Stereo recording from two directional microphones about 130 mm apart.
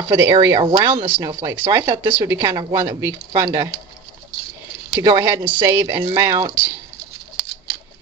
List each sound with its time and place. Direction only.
0.3 s a woman's voice: 30° right (ahead or behind)
5.0 s a woman's voice: 30° right (ahead or behind)